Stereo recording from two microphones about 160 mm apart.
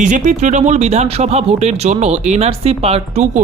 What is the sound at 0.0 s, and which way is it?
Speech, 50° right (ahead or behind).